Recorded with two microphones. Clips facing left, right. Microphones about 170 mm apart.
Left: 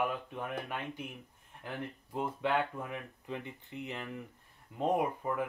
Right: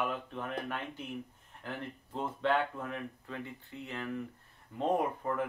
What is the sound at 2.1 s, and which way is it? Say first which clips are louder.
Speech: right 1 dB; 10° left (ahead or behind).